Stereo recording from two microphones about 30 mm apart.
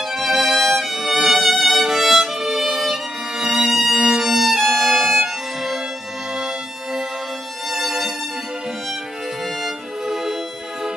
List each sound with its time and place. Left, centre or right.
0.0 s violin: centre
3.4 s violin: right
3.7 s violin: centre
4.5 s violin: centre
6.3 s bagpipes: centre
7.7 s violin: centre
9.6 s music: centre